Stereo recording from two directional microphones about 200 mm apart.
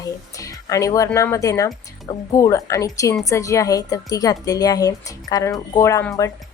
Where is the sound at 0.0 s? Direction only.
15° left (ahead or behind).